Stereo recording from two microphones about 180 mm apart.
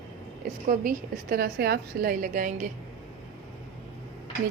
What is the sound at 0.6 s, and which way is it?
A woman's voice, 50° right (ahead or behind).